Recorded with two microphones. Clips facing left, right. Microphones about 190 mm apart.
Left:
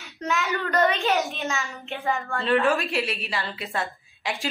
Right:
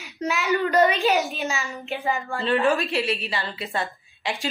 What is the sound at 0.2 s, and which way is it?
Speech, 20° right (ahead or behind).